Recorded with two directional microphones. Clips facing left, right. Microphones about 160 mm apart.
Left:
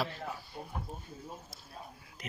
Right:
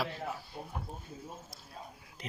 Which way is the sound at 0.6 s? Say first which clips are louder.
Even; 5° right (ahead or behind).